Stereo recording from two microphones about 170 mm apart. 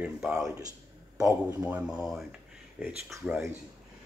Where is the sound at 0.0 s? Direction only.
5° right (ahead or behind).